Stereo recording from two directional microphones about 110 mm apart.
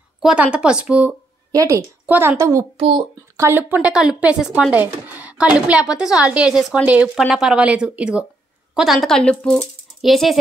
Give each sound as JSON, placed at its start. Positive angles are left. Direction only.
{"t": 0.2, "sound": "a woman's voice", "side_deg": -10}
{"t": 1.5, "sound": "a woman's voice", "side_deg": -30}
{"t": 2.0, "sound": "a woman's voice", "side_deg": -20}
{"t": 3.9, "sound": "a woman's voice", "side_deg": -5}
{"t": 10.0, "sound": "speech", "side_deg": 0}